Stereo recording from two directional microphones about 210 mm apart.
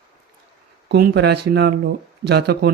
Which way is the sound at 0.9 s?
50° right (ahead or behind).